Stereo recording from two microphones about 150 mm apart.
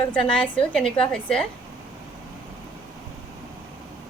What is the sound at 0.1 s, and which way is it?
A woman's voice, 5° left (ahead or behind).